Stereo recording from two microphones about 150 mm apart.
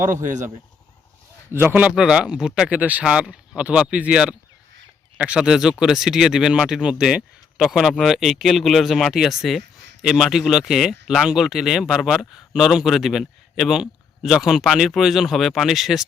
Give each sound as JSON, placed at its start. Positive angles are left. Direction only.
{"t": 0.0, "sound": "speech", "side_deg": -15}
{"t": 1.5, "sound": "speech", "side_deg": -10}